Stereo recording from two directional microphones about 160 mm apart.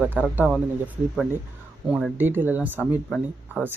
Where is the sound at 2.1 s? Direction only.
10° right (ahead or behind).